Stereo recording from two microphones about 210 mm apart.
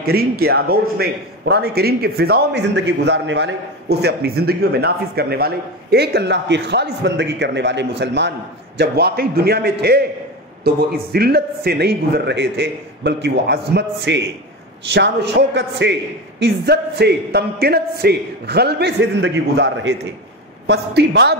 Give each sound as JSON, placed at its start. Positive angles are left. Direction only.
{"t": 0.0, "sound": "a man's voice", "side_deg": -50}